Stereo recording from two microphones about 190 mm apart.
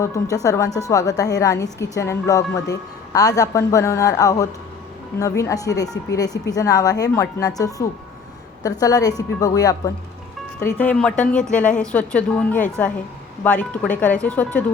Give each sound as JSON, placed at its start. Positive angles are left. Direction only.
{"t": 0.0, "sound": "a woman's voice", "side_deg": 15}